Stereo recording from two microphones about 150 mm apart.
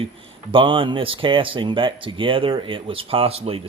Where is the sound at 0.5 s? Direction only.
35° right (ahead or behind).